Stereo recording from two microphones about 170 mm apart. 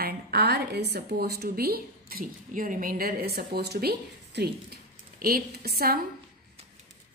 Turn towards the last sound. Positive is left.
turn(degrees=-65)  # may be behind; listen again after turning